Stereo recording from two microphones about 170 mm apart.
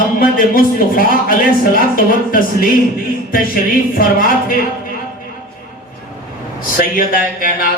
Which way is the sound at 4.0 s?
55° left (ahead or behind).